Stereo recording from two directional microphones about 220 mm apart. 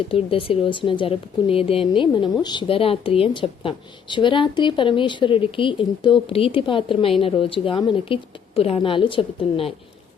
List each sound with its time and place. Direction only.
0.1 s a woman's voice: 25° left (ahead or behind)